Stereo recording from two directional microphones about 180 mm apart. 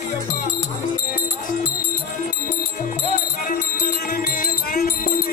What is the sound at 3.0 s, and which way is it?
Music, 50° left (ahead or behind).